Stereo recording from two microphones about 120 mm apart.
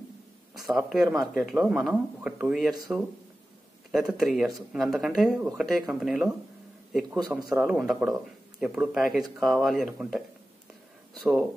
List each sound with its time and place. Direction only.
0.7 s speech: 5° right (ahead or behind)
4.1 s speech: 5° right (ahead or behind)
11.1 s speech: centre (ahead or behind)